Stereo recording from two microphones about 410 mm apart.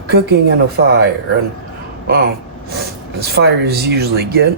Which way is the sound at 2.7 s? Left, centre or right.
Right.